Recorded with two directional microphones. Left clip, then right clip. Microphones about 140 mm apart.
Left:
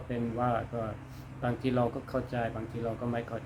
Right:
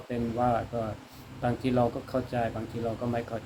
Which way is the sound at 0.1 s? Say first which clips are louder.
Right 4 dB; 20° left (ahead or behind).